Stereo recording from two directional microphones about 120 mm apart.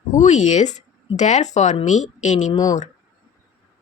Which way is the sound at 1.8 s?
90° left.